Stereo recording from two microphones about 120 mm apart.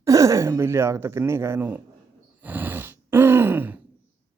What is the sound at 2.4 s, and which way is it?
Groan, 15° right (ahead or behind).